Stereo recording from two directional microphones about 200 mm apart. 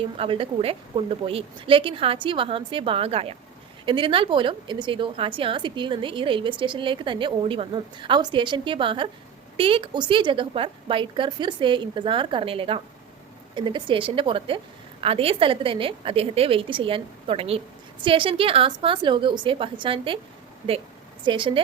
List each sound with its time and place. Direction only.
0.0 s a woman's voice: 25° right (ahead or behind)
21.2 s a woman's voice: 25° right (ahead or behind)